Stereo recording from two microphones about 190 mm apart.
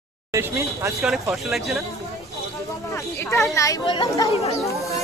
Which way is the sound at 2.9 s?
15° left (ahead or behind).